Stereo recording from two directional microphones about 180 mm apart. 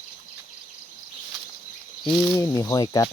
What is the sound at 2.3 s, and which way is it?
Speech, 15° left (ahead or behind).